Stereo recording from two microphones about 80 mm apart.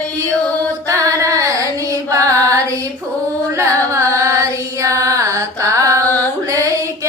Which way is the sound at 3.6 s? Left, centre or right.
Right.